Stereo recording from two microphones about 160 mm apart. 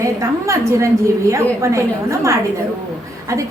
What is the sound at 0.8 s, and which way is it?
A woman's voice, 20° right (ahead or behind).